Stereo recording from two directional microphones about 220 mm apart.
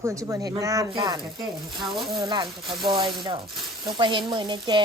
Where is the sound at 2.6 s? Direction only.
Centre (ahead or behind).